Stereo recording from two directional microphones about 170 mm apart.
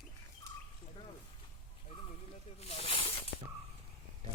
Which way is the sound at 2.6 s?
35° left (ahead or behind).